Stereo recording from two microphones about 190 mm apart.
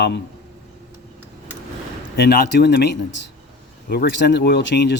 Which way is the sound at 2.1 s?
60° left (ahead or behind).